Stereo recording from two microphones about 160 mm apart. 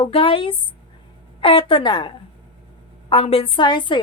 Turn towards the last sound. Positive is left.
turn(degrees=30)  # may be behind; listen again after turning